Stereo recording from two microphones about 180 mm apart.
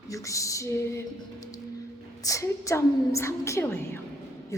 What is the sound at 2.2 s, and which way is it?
A woman's voice, 15° left (ahead or behind).